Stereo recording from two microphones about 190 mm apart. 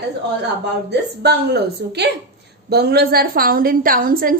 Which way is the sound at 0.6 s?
60° right (ahead or behind).